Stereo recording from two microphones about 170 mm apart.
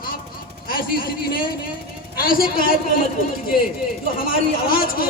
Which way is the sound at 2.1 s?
55° left (ahead or behind).